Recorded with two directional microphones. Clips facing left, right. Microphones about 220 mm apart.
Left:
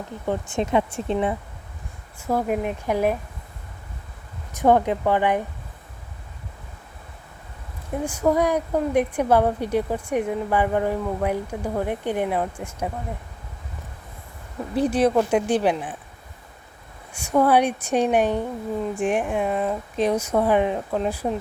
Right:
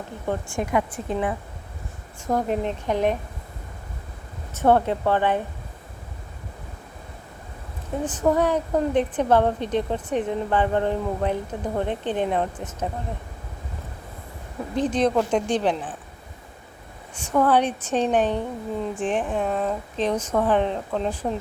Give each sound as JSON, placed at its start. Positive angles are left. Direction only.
{"t": 0.3, "sound": "speech", "side_deg": 20}
{"t": 2.2, "sound": "speech", "side_deg": 10}
{"t": 4.5, "sound": "speech", "side_deg": 15}
{"t": 8.0, "sound": "speech", "side_deg": 10}
{"t": 14.8, "sound": "speech", "side_deg": 10}
{"t": 17.2, "sound": "speech", "side_deg": 10}